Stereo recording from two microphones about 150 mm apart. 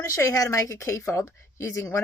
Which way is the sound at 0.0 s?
20° left (ahead or behind).